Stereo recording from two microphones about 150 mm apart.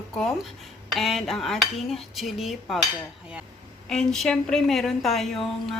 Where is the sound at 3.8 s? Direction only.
5° left (ahead or behind).